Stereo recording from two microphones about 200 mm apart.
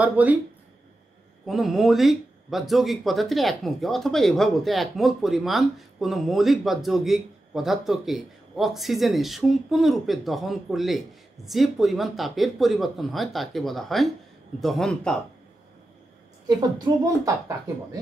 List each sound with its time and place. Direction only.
0.0 s a woman's voice: 5° right (ahead or behind)
1.4 s speech: centre (ahead or behind)
16.4 s a woman's voice: 20° right (ahead or behind)